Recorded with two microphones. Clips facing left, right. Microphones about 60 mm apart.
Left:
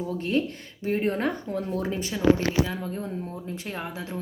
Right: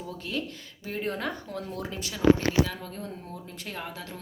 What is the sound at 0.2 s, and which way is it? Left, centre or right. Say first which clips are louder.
Speech: left 8 dB; left.